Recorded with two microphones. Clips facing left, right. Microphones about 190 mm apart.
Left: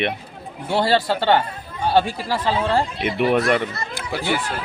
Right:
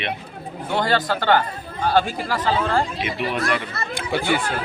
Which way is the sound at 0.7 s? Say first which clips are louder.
Left 2 dB; 30° left (ahead or behind).